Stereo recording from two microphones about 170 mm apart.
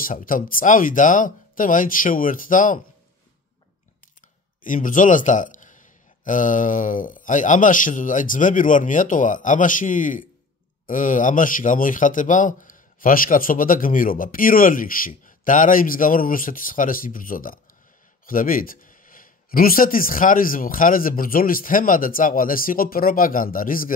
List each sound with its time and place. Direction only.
0.0 s speech: 55° left (ahead or behind)
4.6 s speech: 50° left (ahead or behind)